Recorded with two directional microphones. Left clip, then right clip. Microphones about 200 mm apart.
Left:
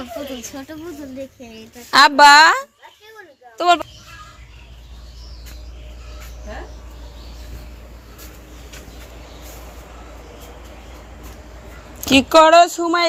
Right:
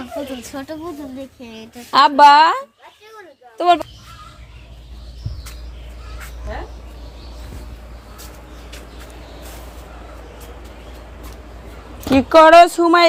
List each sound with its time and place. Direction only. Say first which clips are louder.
1.9 s a woman's voice: even; centre (ahead or behind)
12.3 s speech: right 3 dB; 10° right (ahead or behind)
12.5 s speech: right 4 dB; 25° right (ahead or behind)